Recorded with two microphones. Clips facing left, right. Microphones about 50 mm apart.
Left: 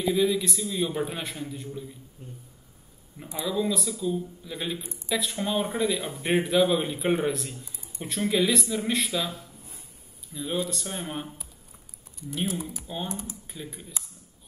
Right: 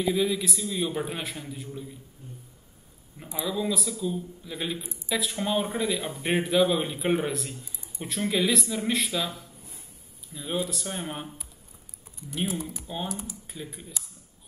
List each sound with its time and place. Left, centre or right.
0.0 s speech: centre
3.4 s speech: centre
9.4 s a sound: left
10.3 s speech: centre